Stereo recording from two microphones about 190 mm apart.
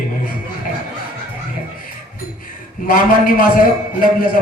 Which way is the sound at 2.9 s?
50° left (ahead or behind).